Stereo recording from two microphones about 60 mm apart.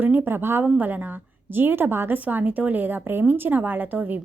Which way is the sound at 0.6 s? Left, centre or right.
Right.